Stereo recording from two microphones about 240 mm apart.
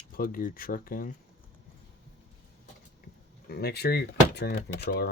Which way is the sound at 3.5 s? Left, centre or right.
Left.